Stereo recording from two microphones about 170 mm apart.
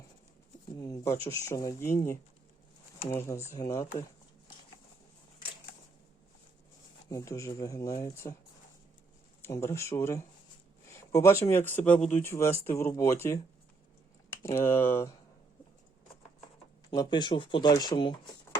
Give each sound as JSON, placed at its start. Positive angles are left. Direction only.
{"t": 0.8, "sound": "speech", "side_deg": 20}
{"t": 3.1, "sound": "speech", "side_deg": 15}
{"t": 7.1, "sound": "speech", "side_deg": 20}
{"t": 9.4, "sound": "speech", "side_deg": 15}
{"t": 16.9, "sound": "speech", "side_deg": 25}